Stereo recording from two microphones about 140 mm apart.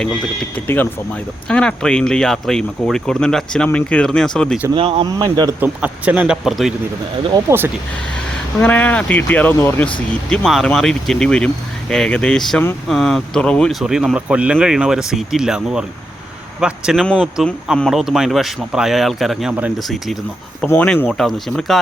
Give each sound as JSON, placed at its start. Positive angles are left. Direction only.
{"t": 0.5, "sound": "speech", "side_deg": 15}
{"t": 4.7, "sound": "speech", "side_deg": -40}
{"t": 5.5, "sound": "speech", "side_deg": -10}
{"t": 7.5, "sound": "speech", "side_deg": -15}
{"t": 8.6, "sound": "speech", "side_deg": 10}
{"t": 10.2, "sound": "speech", "side_deg": 5}
{"t": 20.7, "sound": "speech", "side_deg": 10}